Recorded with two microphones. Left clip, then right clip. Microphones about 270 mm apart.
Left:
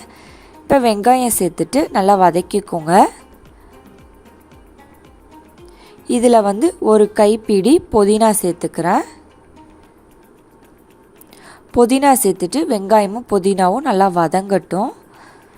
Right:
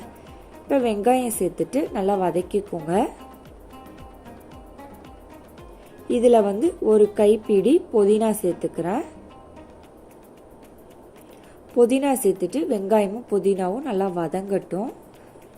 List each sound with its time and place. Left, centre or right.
0.7 s a woman's voice: left
6.1 s a woman's voice: left
11.8 s a woman's voice: left